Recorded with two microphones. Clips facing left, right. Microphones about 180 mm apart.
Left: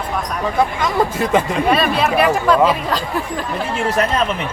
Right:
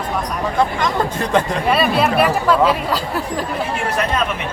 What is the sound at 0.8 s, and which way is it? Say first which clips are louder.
Speech: left 2 dB; 5° left (ahead or behind).